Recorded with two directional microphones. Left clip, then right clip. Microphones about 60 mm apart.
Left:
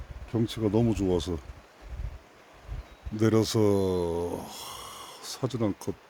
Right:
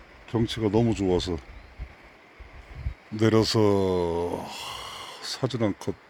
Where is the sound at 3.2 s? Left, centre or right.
Centre.